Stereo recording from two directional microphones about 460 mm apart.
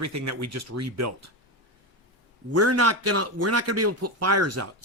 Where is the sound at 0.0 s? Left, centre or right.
Right.